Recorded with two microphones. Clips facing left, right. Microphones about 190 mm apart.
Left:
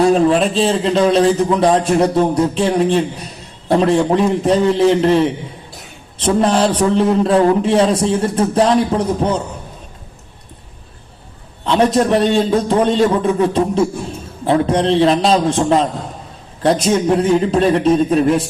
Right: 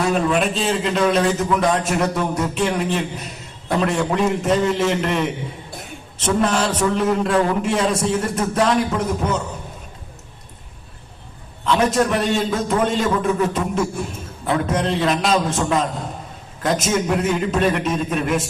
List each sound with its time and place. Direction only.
0.0 s a man's voice: 35° left (ahead or behind)
11.6 s a man's voice: 35° left (ahead or behind)